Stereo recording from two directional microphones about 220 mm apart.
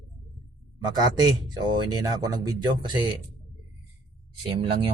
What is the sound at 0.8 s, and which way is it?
Speech, 20° right (ahead or behind).